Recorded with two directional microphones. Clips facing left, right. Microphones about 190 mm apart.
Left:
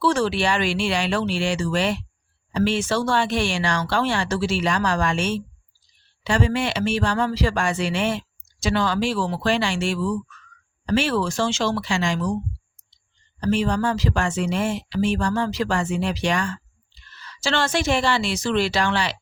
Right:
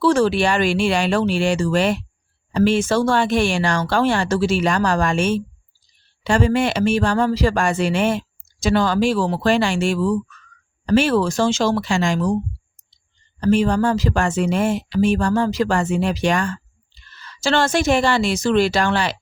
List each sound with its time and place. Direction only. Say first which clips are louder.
0.0 s speech: right 5 dB; 45° right (ahead or behind)
13.4 s speech: right 5 dB; 50° right (ahead or behind)